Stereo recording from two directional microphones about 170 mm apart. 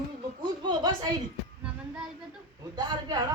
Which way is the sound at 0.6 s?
25° right (ahead or behind).